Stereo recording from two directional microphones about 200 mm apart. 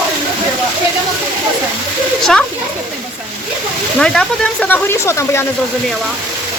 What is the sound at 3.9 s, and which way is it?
Speech, 5° left (ahead or behind).